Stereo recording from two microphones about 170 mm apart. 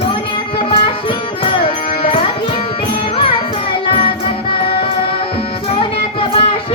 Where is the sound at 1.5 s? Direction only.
35° left (ahead or behind).